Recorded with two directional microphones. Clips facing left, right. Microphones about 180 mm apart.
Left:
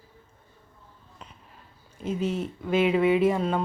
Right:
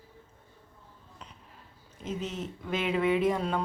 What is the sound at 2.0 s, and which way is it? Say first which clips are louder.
Speech: left 7 dB; 10° left (ahead or behind).